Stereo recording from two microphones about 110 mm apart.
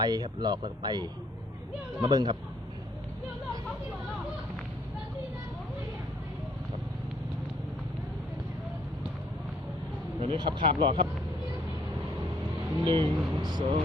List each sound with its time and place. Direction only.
0.0 s speech: 40° right (ahead or behind)
10.2 s speech: 50° right (ahead or behind)
12.8 s speech: 45° right (ahead or behind)